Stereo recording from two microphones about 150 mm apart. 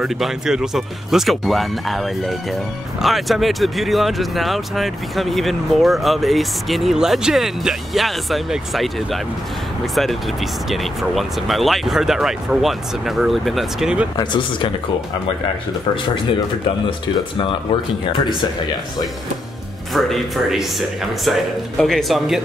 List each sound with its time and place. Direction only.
0.0 s speech: 5° right (ahead or behind)
14.1 s speech: 30° left (ahead or behind)
18.0 s speech: 30° left (ahead or behind)
19.9 s speech: centre (ahead or behind)